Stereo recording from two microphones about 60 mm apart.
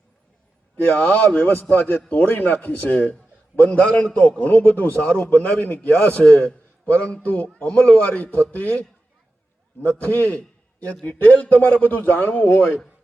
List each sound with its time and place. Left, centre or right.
0.8 s a man's voice: left
10.0 s a man's voice: left
10.3 s a sound: left
11.0 s a man's voice: left